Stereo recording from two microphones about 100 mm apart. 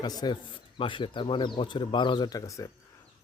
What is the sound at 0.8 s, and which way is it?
Speech, 55° left (ahead or behind).